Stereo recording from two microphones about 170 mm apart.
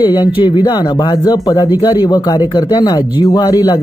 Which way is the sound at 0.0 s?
25° left (ahead or behind).